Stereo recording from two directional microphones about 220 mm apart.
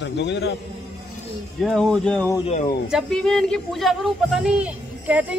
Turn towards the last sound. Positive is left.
turn(degrees=-5)  # may be behind; listen again after turning